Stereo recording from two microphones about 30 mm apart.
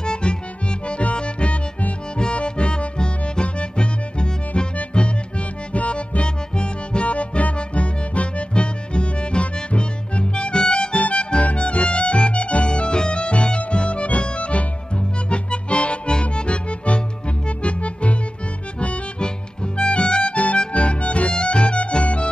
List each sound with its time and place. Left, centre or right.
0.0 s accordion: left
1.1 s music: left
5.7 s music: left
11.0 s music: left
12.6 s music: left
18.8 s harmonica: left
21.3 s music: left